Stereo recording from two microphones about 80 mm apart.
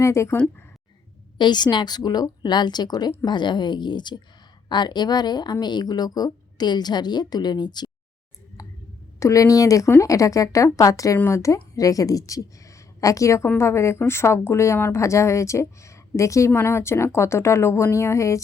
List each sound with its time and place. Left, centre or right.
0.0 s speech: left
1.4 s speech: left
3.2 s speech: left
9.2 s a woman's voice: left